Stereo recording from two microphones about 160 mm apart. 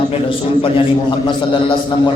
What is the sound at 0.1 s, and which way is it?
Speech, 35° left (ahead or behind).